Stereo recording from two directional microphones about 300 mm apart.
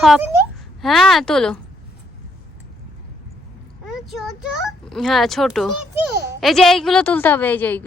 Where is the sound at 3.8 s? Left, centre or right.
Centre.